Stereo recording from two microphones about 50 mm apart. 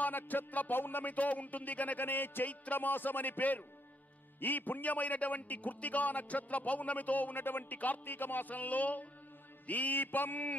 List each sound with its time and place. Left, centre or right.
0.0 s a man's voice: left